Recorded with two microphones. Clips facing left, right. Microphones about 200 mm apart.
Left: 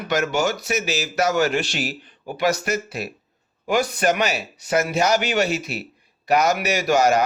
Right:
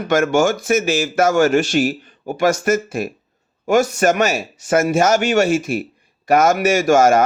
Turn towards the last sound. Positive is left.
turn(degrees=-50)  # may be behind; listen again after turning